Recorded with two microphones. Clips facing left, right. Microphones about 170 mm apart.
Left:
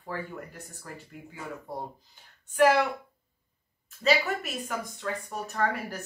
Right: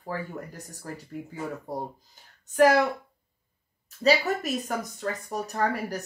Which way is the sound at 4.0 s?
40° right (ahead or behind).